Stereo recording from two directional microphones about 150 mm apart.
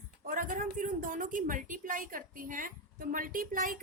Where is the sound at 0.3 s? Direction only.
65° right (ahead or behind).